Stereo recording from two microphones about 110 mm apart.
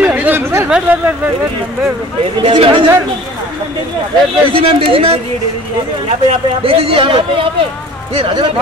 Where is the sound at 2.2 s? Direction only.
55° right (ahead or behind).